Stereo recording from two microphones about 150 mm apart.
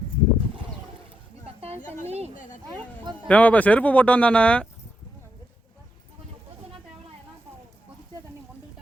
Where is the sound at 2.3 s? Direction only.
60° left (ahead or behind).